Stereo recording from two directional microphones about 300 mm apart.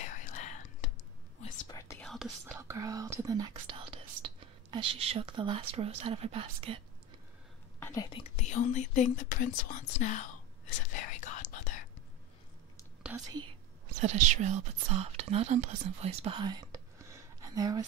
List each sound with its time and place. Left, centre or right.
0.0 s whispering: left
1.4 s speech: centre
7.8 s speech: centre
10.9 s whispering: left
13.0 s speech: centre
14.0 s speech: right